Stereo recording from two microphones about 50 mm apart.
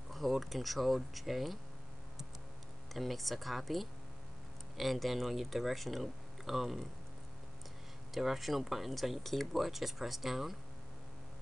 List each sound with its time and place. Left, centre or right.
0.1 s speech: centre
2.9 s speech: centre
8.1 s speech: centre